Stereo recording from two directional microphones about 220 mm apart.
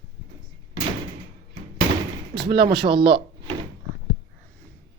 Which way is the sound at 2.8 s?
20° right (ahead or behind).